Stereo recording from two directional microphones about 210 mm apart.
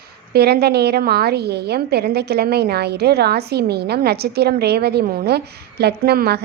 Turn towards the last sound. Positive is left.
turn(degrees=-50)  # may be behind; listen again after turning